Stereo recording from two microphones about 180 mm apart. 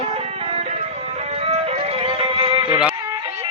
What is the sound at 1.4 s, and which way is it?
Music, 35° right (ahead or behind).